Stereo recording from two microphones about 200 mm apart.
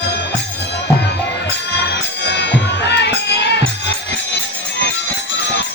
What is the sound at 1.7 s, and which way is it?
Music, 60° left (ahead or behind).